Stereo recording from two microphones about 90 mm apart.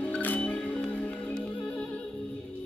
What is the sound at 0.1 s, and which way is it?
Music, 15° left (ahead or behind).